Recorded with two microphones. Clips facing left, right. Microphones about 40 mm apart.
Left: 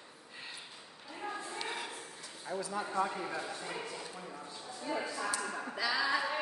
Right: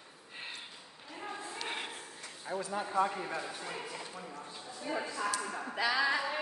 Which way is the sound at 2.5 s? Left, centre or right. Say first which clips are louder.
Right 1 dB; right.